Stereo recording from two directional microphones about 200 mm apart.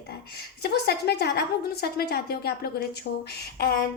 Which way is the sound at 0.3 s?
55° left (ahead or behind).